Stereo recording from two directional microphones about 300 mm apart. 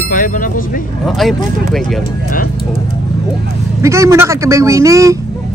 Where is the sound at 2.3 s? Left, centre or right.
Left.